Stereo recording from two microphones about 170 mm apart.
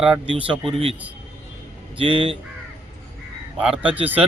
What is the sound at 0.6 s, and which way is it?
Speech, 35° right (ahead or behind).